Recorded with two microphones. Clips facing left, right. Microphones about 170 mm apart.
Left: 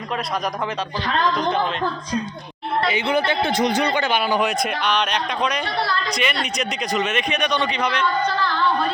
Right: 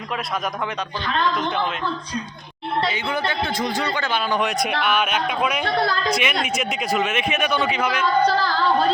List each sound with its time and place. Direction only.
2.9 s a man's voice: 20° left (ahead or behind)
4.4 s a man's voice: centre (ahead or behind)
5.6 s a woman's voice: 50° right (ahead or behind)
6.1 s a man's voice: 5° right (ahead or behind)
8.3 s music: 35° right (ahead or behind)